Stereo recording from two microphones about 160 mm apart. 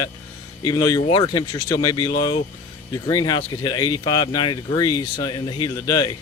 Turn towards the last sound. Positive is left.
turn(degrees=25)  # may be behind; listen again after turning